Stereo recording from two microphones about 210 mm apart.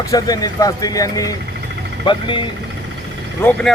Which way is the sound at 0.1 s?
15° left (ahead or behind).